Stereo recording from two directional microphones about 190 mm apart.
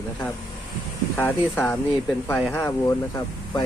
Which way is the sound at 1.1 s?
10° left (ahead or behind).